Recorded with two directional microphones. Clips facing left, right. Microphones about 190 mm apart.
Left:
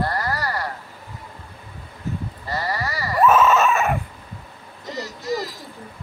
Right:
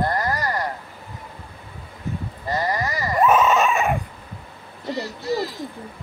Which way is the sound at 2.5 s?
20° right (ahead or behind).